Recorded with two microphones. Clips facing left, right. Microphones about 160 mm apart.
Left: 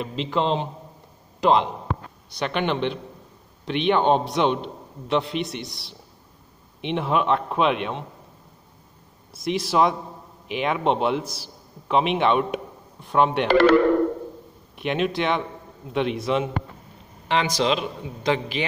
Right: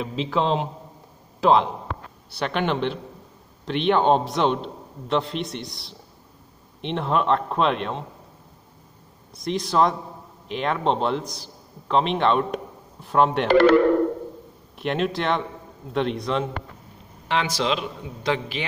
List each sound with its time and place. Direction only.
0.0 s a man's voice: centre (ahead or behind)
9.3 s a man's voice: 5° left (ahead or behind)
13.5 s speech: 90° left
14.8 s a man's voice: centre (ahead or behind)